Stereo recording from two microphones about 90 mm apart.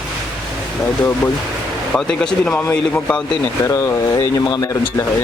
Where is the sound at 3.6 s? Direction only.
35° left (ahead or behind).